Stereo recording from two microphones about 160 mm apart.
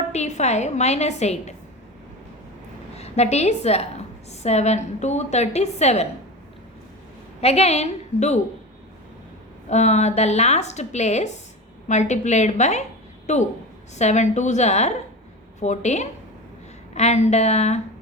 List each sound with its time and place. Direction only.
0.1 s a woman's voice: 45° left (ahead or behind)
2.9 s a woman's voice: 40° left (ahead or behind)
7.4 s a woman's voice: 40° left (ahead or behind)
9.6 s a woman's voice: 45° left (ahead or behind)